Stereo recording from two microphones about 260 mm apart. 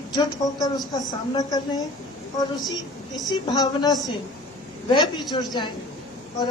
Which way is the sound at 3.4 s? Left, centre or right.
Centre.